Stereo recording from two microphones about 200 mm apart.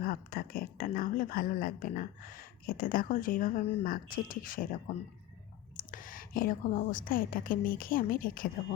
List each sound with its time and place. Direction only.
0.0 s a woman's voice: 45° left (ahead or behind)